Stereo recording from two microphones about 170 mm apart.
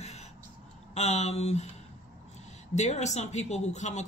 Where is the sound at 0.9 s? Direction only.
40° left (ahead or behind).